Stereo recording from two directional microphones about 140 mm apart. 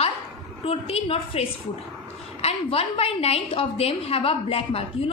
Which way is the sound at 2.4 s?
45° left (ahead or behind).